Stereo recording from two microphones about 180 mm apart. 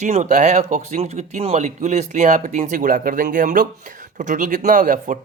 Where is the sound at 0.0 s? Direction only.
40° right (ahead or behind).